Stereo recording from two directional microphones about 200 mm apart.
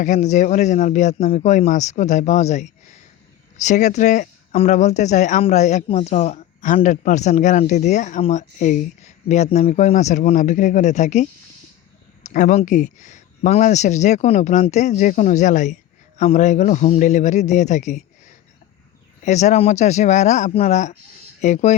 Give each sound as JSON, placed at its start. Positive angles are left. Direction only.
{"t": 0.0, "sound": "speech", "side_deg": 35}